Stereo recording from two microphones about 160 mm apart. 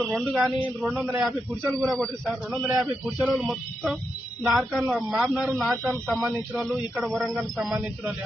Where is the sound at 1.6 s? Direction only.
15° right (ahead or behind).